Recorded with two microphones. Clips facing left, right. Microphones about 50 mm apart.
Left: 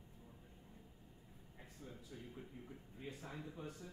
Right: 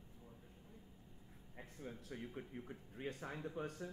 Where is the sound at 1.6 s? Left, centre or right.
Right.